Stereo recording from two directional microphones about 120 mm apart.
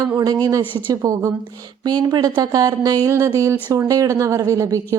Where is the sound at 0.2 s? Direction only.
30° right (ahead or behind).